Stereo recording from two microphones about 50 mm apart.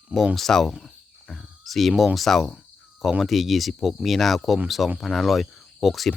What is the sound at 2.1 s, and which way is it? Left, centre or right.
Speech, centre.